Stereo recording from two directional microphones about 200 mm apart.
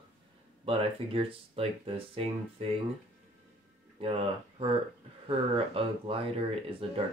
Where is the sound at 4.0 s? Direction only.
30° right (ahead or behind).